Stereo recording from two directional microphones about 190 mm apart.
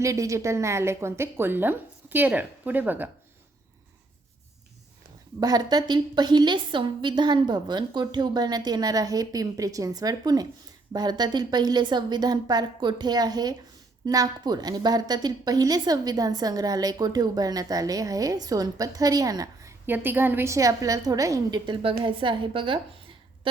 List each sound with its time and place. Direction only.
0.0 s speech: 15° right (ahead or behind)
5.4 s a woman's voice: 20° right (ahead or behind)